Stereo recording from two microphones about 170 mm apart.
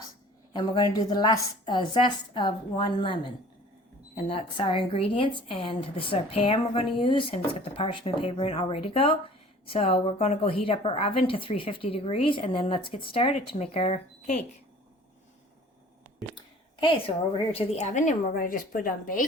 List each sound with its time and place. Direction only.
0.5 s a woman's voice: 25° left (ahead or behind)
16.8 s a woman's voice: 30° left (ahead or behind); by 19.2 s 55° left (ahead or behind)